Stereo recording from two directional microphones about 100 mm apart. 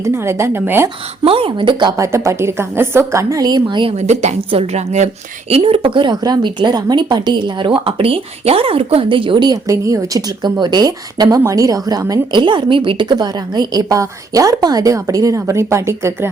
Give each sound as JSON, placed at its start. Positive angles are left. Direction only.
{"t": 0.0, "sound": "a woman's voice", "side_deg": -25}
{"t": 1.2, "sound": "speech", "side_deg": -65}
{"t": 2.0, "sound": "a woman's voice", "side_deg": -30}
{"t": 3.9, "sound": "a woman's voice", "side_deg": -80}
{"t": 9.5, "sound": "speech", "side_deg": -35}
{"t": 12.4, "sound": "a woman's voice", "side_deg": -50}